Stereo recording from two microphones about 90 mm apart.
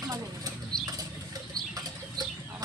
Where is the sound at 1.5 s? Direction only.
50° right (ahead or behind).